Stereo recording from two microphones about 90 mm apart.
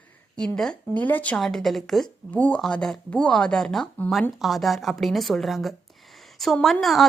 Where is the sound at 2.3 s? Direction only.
15° left (ahead or behind).